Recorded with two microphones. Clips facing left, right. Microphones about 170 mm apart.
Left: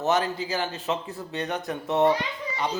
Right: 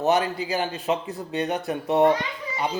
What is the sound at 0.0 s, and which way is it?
A man's voice, 15° right (ahead or behind).